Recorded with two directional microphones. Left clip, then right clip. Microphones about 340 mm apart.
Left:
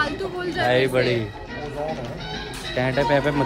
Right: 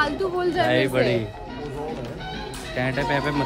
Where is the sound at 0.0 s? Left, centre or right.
Right.